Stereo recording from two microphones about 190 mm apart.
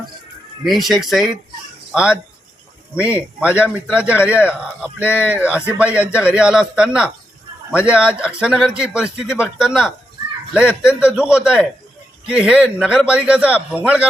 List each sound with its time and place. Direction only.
0.6 s a man's voice: centre (ahead or behind)
5.0 s speech: 10° left (ahead or behind)
5.3 s a man's voice: 5° right (ahead or behind)